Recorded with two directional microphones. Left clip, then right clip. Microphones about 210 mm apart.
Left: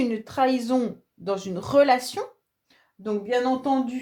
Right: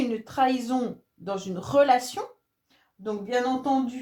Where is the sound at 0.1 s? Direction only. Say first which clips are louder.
Left 1 dB; 40° left (ahead or behind).